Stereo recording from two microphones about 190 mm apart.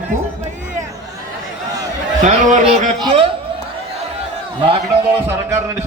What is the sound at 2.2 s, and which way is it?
Speech, 40° right (ahead or behind).